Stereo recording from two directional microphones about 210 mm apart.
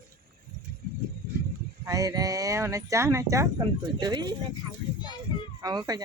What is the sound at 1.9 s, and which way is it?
Speech, 15° right (ahead or behind).